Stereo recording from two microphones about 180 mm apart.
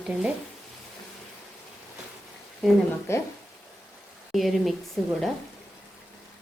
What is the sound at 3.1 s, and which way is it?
Speech, 15° left (ahead or behind).